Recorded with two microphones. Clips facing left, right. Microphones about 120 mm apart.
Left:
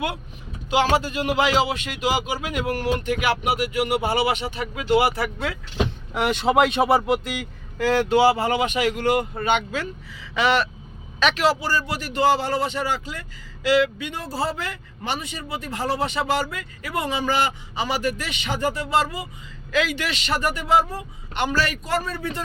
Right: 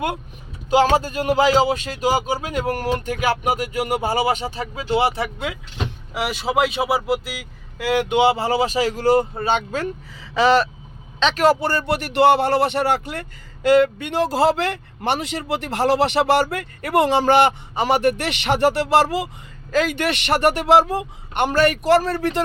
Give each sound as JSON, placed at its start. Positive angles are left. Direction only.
{"t": 0.7, "sound": "speech", "side_deg": -40}
{"t": 6.1, "sound": "a man's voice", "side_deg": -5}
{"t": 11.3, "sound": "speech", "side_deg": -55}
{"t": 14.1, "sound": "speech", "side_deg": -85}
{"t": 19.7, "sound": "speech", "side_deg": -50}
{"t": 21.3, "sound": "speech", "side_deg": -55}